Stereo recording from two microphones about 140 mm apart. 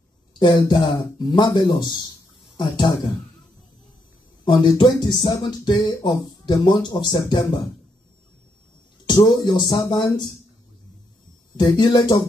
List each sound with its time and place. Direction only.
0.4 s speech: 30° left (ahead or behind)
4.5 s speech: 30° left (ahead or behind)
9.0 s speech: 35° left (ahead or behind)
11.5 s speech: 30° left (ahead or behind)